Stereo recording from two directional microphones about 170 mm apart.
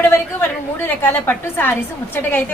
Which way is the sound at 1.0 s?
10° left (ahead or behind).